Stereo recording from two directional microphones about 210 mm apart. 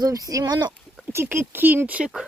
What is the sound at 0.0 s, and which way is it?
Speech, 15° right (ahead or behind).